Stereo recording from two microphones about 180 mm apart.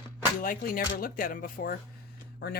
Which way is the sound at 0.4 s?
50° left (ahead or behind).